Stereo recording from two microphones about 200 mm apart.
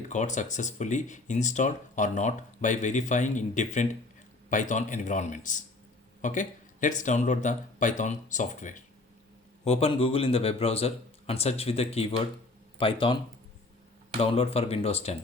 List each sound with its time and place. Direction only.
0.1 s speech: 35° left (ahead or behind)
9.6 s speech: 30° left (ahead or behind)
14.2 s speech: 30° left (ahead or behind)